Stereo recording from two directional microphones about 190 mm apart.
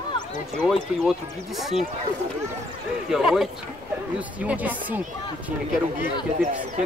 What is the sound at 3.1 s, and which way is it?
Speech, 5° right (ahead or behind).